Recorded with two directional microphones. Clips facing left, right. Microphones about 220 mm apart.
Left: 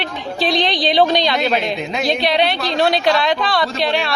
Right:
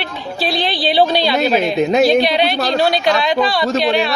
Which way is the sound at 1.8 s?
45° right (ahead or behind).